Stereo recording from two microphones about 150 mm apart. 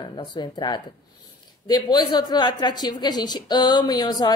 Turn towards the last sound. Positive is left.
turn(degrees=25)  # may be behind; listen again after turning